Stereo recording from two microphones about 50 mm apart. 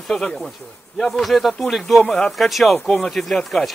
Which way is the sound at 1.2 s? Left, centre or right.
Centre.